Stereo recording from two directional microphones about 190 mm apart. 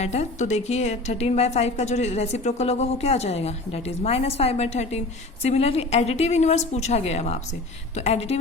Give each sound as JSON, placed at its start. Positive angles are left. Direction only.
{"t": 0.0, "sound": "a woman's voice", "side_deg": 35}